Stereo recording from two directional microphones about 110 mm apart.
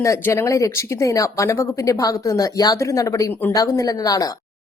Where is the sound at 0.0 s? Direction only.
25° left (ahead or behind).